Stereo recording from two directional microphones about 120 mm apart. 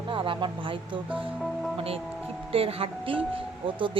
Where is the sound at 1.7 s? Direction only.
50° right (ahead or behind).